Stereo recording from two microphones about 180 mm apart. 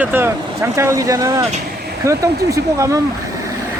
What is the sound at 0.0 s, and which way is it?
Speech, 10° right (ahead or behind).